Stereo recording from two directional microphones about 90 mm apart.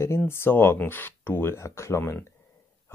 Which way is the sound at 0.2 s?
25° left (ahead or behind).